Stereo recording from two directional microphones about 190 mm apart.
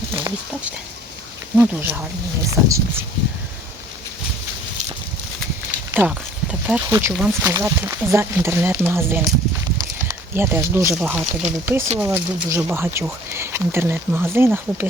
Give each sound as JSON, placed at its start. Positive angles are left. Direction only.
{"t": 0.2, "sound": "speech", "side_deg": -10}
{"t": 5.9, "sound": "speech", "side_deg": -5}